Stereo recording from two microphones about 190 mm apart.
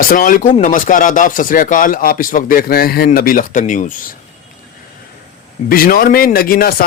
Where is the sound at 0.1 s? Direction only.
45° left (ahead or behind).